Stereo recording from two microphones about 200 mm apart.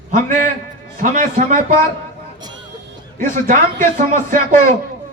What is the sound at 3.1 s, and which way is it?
A man's voice, 40° right (ahead or behind).